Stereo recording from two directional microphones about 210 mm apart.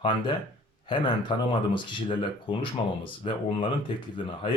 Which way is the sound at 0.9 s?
20° left (ahead or behind).